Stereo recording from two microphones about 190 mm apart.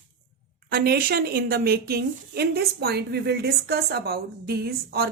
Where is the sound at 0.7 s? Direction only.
55° right (ahead or behind).